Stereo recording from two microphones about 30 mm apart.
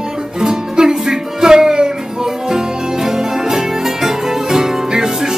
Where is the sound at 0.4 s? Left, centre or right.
Right.